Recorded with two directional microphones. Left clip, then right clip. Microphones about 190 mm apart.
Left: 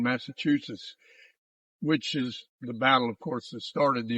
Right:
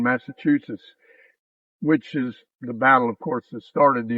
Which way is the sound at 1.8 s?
35° left (ahead or behind).